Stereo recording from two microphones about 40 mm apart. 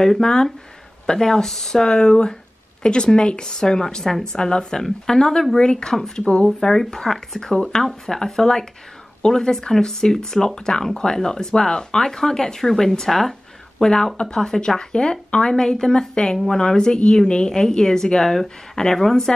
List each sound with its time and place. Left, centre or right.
0.2 s speech: centre
5.9 s speech: centre
6.3 s speech: centre